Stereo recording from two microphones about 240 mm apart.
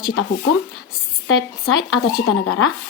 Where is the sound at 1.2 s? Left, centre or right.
Left.